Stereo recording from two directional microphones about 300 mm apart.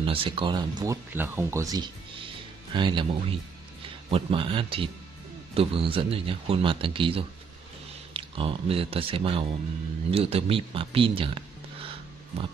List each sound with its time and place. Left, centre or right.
0.0 s speech: centre